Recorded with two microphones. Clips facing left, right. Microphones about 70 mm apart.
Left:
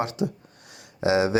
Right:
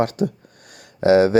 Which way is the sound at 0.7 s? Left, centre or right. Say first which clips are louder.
Right 8 dB; right.